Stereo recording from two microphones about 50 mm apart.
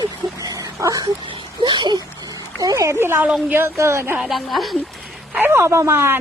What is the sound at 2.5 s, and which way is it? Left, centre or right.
Speech, right.